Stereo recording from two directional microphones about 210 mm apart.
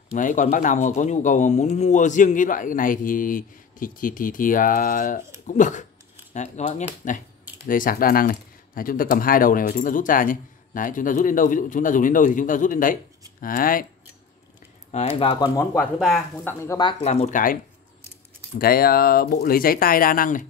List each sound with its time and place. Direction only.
0.1 s speech: 35° left (ahead or behind)
14.9 s speech: 30° left (ahead or behind)
15.7 s speech: 5° left (ahead or behind)
16.5 s speech: 15° left (ahead or behind)
17.0 s speech: 30° left (ahead or behind)
18.6 s speech: 45° left (ahead or behind)